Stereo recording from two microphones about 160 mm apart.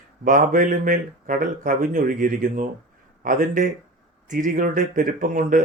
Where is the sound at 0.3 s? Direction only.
55° right (ahead or behind).